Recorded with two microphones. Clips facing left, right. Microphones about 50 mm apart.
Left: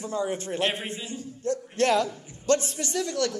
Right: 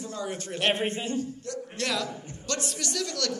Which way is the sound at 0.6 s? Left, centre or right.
Right.